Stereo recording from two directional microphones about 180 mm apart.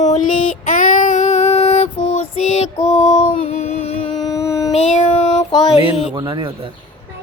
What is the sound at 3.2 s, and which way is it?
Music, 40° left (ahead or behind).